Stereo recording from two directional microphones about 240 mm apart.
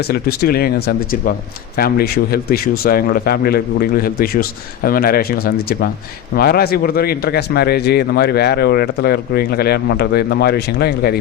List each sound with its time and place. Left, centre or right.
0.0 s a man's voice: left